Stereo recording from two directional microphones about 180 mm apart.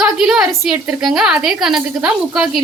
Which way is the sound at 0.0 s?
5° right (ahead or behind).